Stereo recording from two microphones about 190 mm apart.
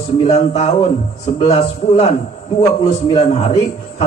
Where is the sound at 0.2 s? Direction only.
35° left (ahead or behind).